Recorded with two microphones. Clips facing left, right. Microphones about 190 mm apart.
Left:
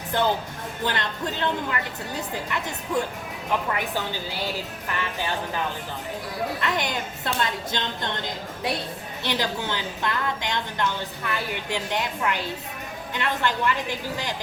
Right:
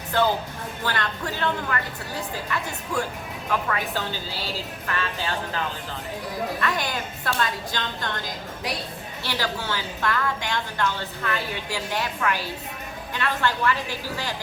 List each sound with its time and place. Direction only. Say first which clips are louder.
0.9 s a woman's voice: even; 20° left (ahead or behind)
6.6 s a woman's voice: even; 20° left (ahead or behind)
9.2 s a woman's voice: left 2 dB; 20° left (ahead or behind)